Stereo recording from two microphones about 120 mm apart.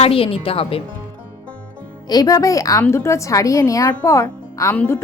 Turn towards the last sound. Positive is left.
turn(degrees=20)  # may be behind; listen again after turning